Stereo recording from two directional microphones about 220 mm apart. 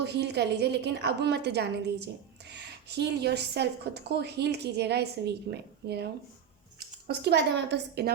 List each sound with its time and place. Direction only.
0.0 s a woman's voice: 50° right (ahead or behind)